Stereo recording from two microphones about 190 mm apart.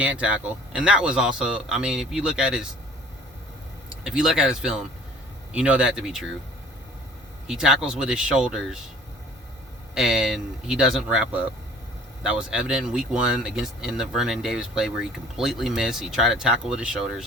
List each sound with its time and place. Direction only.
0.0 s speech: 5° right (ahead or behind)
4.0 s speech: centre (ahead or behind)
7.4 s speech: 5° right (ahead or behind)
9.9 s speech: 5° right (ahead or behind)